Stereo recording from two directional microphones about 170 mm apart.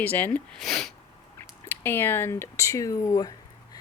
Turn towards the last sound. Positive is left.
turn(degrees=20)  # may be behind; listen again after turning